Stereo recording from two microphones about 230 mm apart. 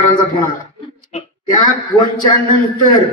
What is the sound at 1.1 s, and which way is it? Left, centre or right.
Speech, left.